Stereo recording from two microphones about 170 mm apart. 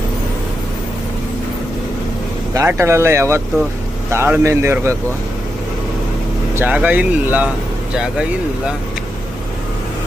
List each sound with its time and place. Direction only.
2.5 s speech: 15° right (ahead or behind)
6.6 s speech: 10° right (ahead or behind)